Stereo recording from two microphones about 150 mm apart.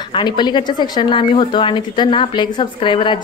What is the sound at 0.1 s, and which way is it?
A woman's voice, 30° left (ahead or behind).